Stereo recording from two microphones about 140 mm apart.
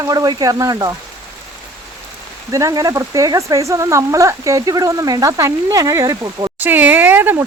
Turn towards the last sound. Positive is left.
turn(degrees=-15)  # may be behind; listen again after turning